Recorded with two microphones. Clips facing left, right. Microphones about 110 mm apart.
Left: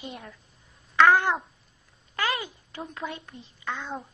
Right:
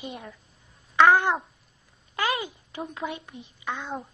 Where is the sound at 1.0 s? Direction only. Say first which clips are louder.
Right 1 dB; 20° right (ahead or behind).